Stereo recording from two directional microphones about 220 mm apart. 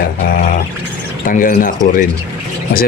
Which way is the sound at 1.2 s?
35° left (ahead or behind).